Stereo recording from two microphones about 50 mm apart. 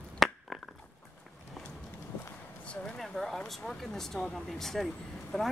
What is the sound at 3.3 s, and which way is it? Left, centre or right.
Speech, centre.